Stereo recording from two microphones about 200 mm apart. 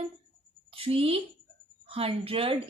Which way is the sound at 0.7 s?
30° right (ahead or behind).